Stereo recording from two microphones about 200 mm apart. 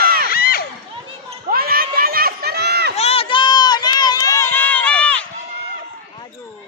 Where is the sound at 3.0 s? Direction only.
30° left (ahead or behind); by 5.3 s 5° left (ahead or behind).